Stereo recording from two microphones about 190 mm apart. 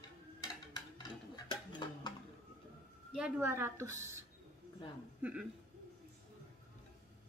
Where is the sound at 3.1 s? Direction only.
10° right (ahead or behind).